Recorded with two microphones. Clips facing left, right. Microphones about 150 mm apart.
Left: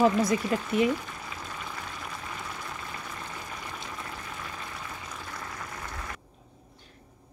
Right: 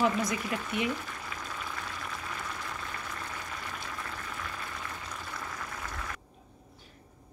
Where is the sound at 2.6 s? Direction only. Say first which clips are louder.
Even; 5° left (ahead or behind).